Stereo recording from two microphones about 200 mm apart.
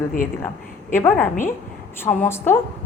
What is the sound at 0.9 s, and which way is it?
A woman's voice, 10° left (ahead or behind).